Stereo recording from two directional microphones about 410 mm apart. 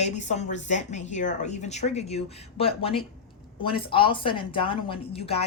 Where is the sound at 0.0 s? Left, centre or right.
Centre.